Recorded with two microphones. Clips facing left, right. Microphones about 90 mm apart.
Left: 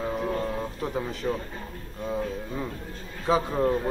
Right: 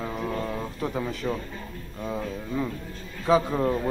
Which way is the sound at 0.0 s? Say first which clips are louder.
Left 2 dB; 20° left (ahead or behind).